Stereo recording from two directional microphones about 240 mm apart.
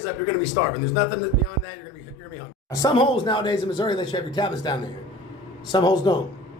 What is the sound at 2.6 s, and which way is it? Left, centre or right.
A man's voice, centre.